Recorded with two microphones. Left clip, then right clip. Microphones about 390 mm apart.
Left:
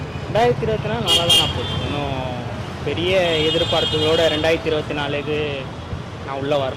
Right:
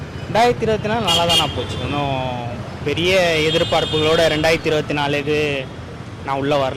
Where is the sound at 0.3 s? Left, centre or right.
Right.